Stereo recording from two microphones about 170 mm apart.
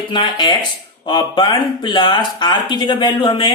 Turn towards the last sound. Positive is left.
turn(degrees=30)  # may be behind; listen again after turning